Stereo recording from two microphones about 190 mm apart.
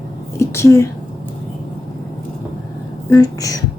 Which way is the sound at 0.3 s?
15° left (ahead or behind).